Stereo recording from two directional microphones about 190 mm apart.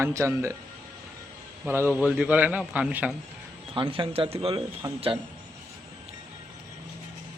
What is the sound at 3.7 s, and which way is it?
Speech, 25° right (ahead or behind).